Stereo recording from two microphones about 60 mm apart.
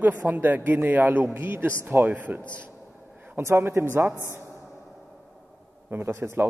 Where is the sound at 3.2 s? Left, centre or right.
Right.